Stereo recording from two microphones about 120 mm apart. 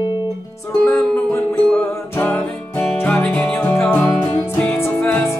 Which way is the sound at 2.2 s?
5° left (ahead or behind).